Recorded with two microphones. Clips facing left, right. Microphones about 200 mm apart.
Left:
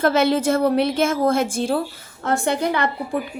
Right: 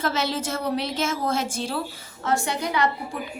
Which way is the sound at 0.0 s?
55° left (ahead or behind).